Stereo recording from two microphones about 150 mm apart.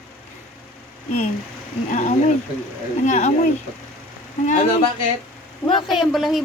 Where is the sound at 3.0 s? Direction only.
50° left (ahead or behind).